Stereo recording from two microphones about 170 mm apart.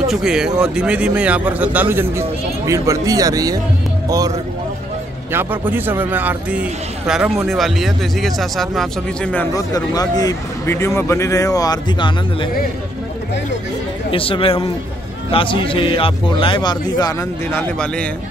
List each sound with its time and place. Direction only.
0.1 s a man's voice: 5° right (ahead or behind); by 3.5 s 20° right (ahead or behind)
5.3 s a man's voice: 10° right (ahead or behind); by 9.5 s 5° left (ahead or behind)
9.5 s speech: 20° left (ahead or behind)
14.1 s a man's voice: 30° left (ahead or behind); by 18.0 s 10° left (ahead or behind)